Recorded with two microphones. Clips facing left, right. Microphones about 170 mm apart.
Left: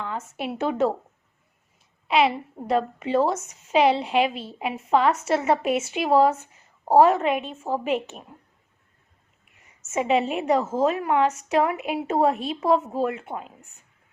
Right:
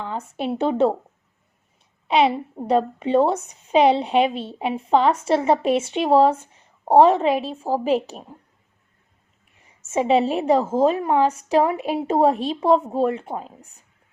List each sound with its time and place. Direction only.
0.0 s a woman's voice: 30° right (ahead or behind)
2.1 s a woman's voice: 35° right (ahead or behind)
9.6 s a woman's voice: 30° right (ahead or behind)